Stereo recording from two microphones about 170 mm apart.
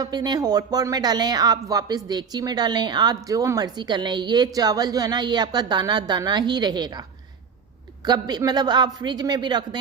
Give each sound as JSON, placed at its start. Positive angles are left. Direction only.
{"t": 0.0, "sound": "a woman's voice", "side_deg": -25}
{"t": 8.0, "sound": "a woman's voice", "side_deg": -25}